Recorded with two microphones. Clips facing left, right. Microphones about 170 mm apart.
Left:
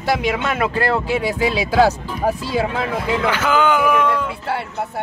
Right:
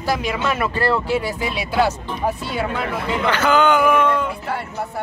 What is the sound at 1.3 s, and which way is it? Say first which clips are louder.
Speech: left 4 dB; 90° left.